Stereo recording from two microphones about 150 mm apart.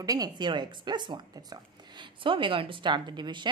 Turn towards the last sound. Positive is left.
turn(degrees=-30)  # may be behind; listen again after turning